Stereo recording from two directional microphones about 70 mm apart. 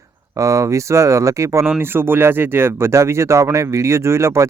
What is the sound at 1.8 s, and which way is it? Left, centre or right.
Speech, right.